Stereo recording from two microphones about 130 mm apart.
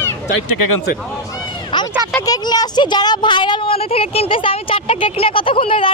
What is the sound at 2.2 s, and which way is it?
Speech, 30° left (ahead or behind).